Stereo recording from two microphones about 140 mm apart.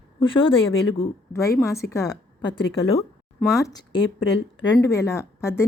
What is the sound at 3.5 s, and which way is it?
Speech, 25° left (ahead or behind).